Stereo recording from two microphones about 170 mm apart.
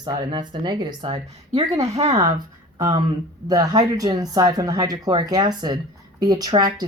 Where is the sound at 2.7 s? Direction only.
25° right (ahead or behind).